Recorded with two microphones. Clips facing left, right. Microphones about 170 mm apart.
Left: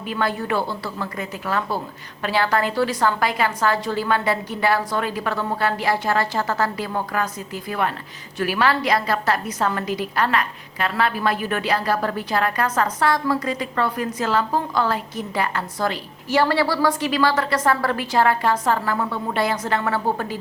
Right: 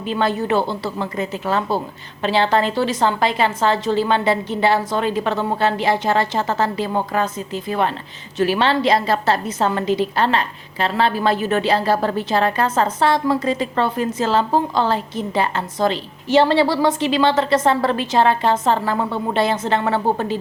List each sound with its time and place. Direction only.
0.1 s a woman's voice: 25° right (ahead or behind)